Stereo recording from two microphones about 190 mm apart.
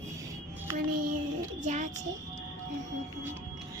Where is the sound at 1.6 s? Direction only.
40° right (ahead or behind).